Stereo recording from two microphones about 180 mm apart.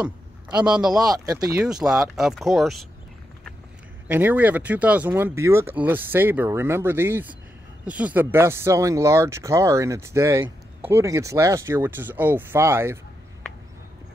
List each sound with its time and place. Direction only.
0.6 s speech: 5° right (ahead or behind)
1.0 s speech: 20° right (ahead or behind)
1.4 s speech: 5° right (ahead or behind)
4.1 s speech: 10° right (ahead or behind)